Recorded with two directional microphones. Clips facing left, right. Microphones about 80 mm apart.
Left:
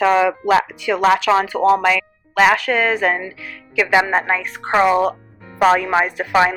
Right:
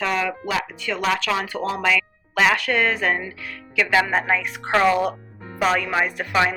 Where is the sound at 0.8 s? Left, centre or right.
Centre.